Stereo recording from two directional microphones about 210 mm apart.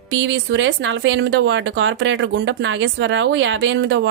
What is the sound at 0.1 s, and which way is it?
Speech, 60° right (ahead or behind).